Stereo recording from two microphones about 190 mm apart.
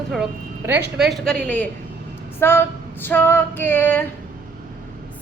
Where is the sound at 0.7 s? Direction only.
60° right (ahead or behind).